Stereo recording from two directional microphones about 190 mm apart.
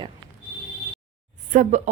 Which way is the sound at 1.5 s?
40° right (ahead or behind).